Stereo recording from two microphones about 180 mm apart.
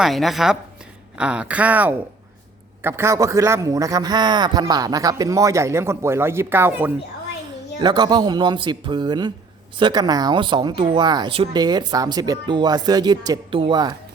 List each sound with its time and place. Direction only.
0.0 s a woman's voice: centre (ahead or behind)
7.8 s speech: 25° right (ahead or behind)